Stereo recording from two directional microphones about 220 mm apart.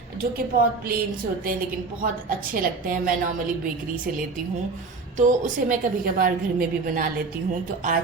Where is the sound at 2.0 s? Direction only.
40° right (ahead or behind).